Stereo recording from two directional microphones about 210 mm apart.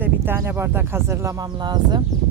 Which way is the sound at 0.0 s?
10° right (ahead or behind).